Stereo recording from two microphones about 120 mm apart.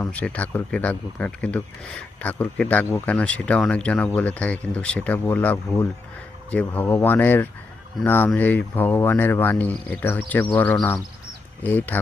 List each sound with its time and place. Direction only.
0.1 s speech: 10° left (ahead or behind)